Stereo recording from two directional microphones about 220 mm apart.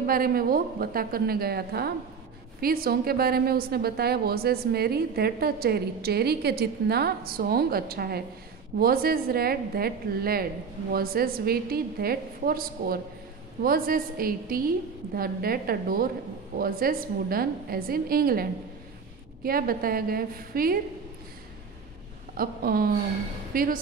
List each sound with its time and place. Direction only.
0.0 s a woman's voice: 40° right (ahead or behind)
22.4 s a woman's voice: 40° right (ahead or behind)